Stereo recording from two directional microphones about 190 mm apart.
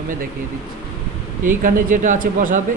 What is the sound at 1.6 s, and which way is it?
Speech, 45° right (ahead or behind).